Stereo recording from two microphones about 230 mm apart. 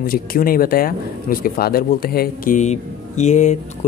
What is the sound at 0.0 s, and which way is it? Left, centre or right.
Speech, left.